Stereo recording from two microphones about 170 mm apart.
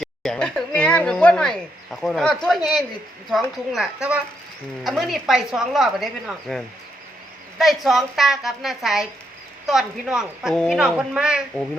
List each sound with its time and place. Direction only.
0.0 s a woman's voice: 5° left (ahead or behind)
7.6 s a woman's voice: centre (ahead or behind)